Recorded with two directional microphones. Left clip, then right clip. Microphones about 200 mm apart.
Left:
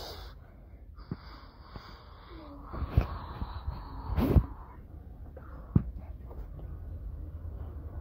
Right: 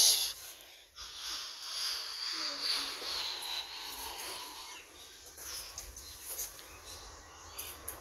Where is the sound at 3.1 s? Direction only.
40° right (ahead or behind).